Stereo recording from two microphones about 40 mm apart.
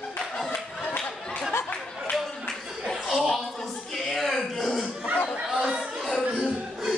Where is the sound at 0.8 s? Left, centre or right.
Left.